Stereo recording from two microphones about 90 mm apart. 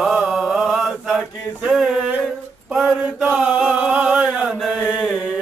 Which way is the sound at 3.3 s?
10° right (ahead or behind).